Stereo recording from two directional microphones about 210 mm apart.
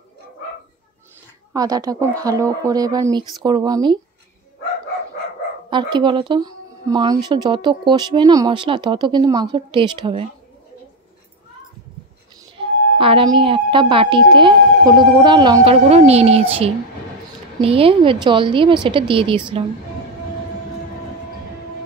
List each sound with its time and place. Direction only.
1.5 s speech: 15° right (ahead or behind)
5.7 s speech: 20° right (ahead or behind)
12.5 s speech: 25° right (ahead or behind)